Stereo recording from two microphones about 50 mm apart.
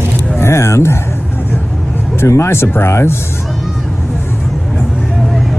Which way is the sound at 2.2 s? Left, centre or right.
Left.